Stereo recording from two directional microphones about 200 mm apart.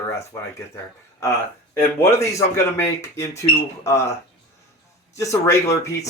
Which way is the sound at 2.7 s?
15° left (ahead or behind).